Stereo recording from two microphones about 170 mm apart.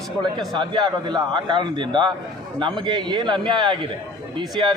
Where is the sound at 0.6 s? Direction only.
25° right (ahead or behind).